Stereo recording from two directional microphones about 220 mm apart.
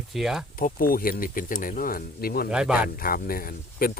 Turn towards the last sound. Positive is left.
turn(degrees=40)  # may be behind; listen again after turning